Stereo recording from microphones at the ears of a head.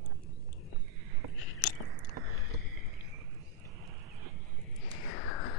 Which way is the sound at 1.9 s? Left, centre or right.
Right.